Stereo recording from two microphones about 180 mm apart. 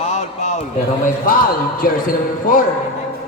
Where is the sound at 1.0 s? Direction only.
50° left (ahead or behind).